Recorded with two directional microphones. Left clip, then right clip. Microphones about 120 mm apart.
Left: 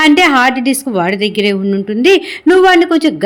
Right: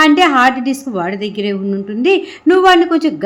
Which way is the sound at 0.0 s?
20° left (ahead or behind).